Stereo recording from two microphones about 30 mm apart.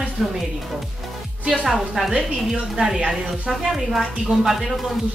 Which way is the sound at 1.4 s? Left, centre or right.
Right.